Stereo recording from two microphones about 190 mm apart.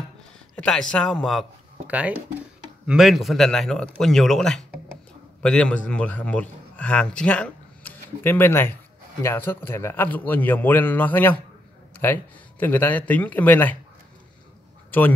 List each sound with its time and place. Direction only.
0.6 s a man's voice: 5° left (ahead or behind)
14.9 s speech: 10° left (ahead or behind)